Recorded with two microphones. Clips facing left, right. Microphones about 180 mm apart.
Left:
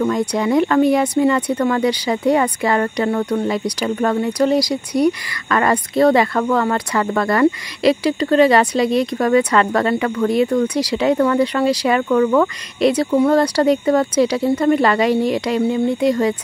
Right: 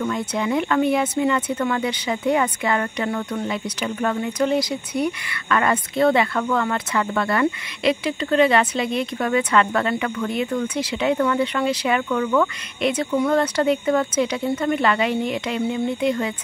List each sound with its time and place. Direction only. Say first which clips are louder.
0.0 s speech: left 6 dB; 40° left (ahead or behind)